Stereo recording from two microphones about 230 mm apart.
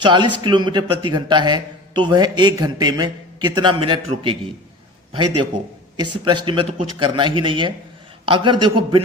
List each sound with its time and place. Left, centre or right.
0.0 s speech: centre
6.0 s a man's voice: centre